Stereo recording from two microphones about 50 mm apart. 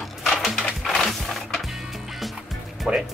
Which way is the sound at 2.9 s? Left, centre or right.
Centre.